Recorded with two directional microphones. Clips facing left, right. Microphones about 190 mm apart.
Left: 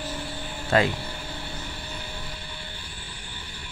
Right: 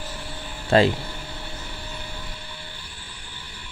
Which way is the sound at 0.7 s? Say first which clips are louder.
Right 4 dB; 30° right (ahead or behind).